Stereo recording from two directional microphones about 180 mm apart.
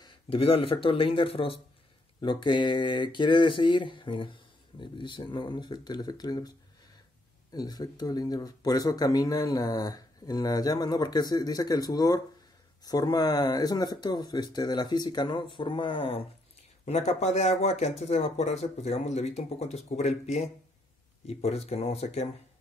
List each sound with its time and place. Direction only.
0.0 s speech: 30° left (ahead or behind)
7.5 s speech: 20° left (ahead or behind)